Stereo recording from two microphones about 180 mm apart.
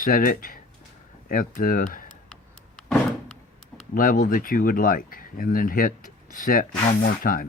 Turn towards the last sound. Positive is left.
turn(degrees=55)  # may be behind; listen again after turning